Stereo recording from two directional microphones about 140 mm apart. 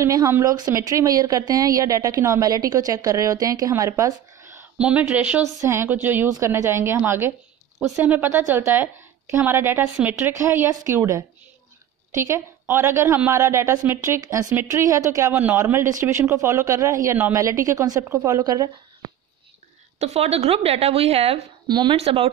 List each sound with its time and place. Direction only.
0.0 s a woman's voice: 25° right (ahead or behind)
4.7 s a woman's voice: 10° right (ahead or behind); by 18.7 s 25° right (ahead or behind)
20.0 s a woman's voice: 50° right (ahead or behind)
21.6 s speech: 30° right (ahead or behind)
21.9 s a woman's voice: 45° right (ahead or behind)